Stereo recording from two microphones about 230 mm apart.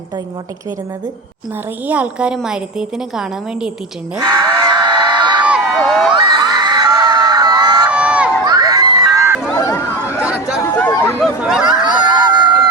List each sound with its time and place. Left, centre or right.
1.9 s a woman's voice: centre
4.2 s screaming: centre
5.5 s crowd: centre
6.1 s crowd: centre
7.9 s crowd: centre
8.4 s crowd: centre
9.4 s a sound: centre
11.2 s a sound: centre
11.8 s a sound: centre